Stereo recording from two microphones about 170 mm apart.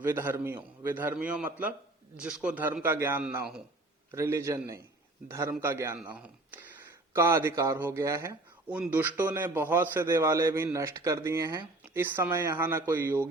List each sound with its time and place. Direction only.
0.0 s a man's voice: 15° right (ahead or behind)